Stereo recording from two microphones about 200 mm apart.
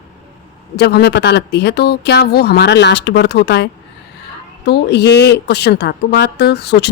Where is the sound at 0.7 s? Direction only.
55° left (ahead or behind).